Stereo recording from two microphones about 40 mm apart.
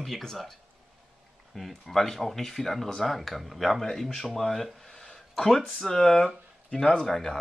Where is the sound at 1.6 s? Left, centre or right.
Centre.